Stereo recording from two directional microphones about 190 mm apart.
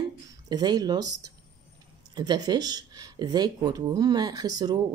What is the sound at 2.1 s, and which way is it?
Speech, 20° right (ahead or behind).